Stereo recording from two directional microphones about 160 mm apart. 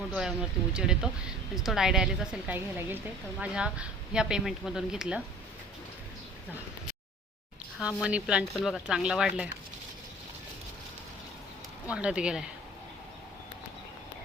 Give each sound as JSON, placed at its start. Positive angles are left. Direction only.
{"t": 0.1, "sound": "speech", "side_deg": -5}
{"t": 8.0, "sound": "speech", "side_deg": -5}
{"t": 11.9, "sound": "speech", "side_deg": -5}